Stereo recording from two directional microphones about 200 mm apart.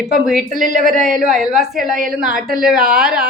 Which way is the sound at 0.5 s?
40° right (ahead or behind).